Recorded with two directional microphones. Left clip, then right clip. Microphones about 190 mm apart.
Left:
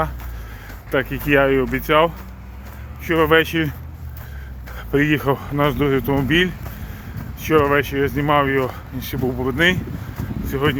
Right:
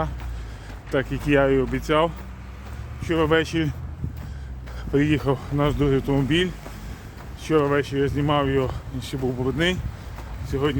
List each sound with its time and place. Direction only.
0.9 s speech: 25° left (ahead or behind)
4.8 s speech: 20° left (ahead or behind)